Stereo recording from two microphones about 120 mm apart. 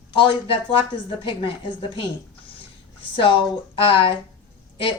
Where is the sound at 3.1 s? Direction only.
45° left (ahead or behind).